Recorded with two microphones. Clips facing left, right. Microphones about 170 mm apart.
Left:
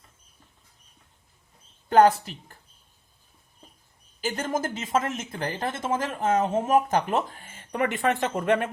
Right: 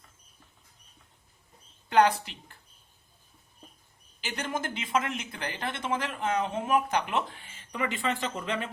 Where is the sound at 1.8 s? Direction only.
45° left (ahead or behind).